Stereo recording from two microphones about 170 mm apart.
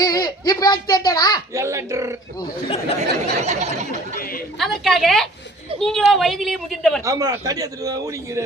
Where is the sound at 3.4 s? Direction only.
40° right (ahead or behind).